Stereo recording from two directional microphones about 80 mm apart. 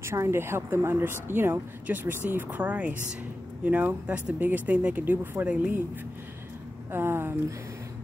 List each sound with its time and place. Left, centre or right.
0.0 s speech: right; by 5.8 s centre
6.9 s speech: right